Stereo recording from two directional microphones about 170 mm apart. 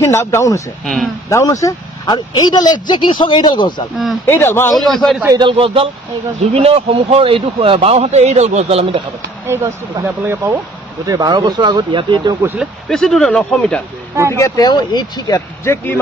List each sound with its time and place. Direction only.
0.0 s speech: 15° left (ahead or behind)
4.3 s speech: 15° left (ahead or behind)
4.7 s speech: centre (ahead or behind)
5.4 s speech: 30° right (ahead or behind)
9.5 s speech: 15° right (ahead or behind)
12.8 s speech: 5° left (ahead or behind)
14.3 s speech: 20° left (ahead or behind)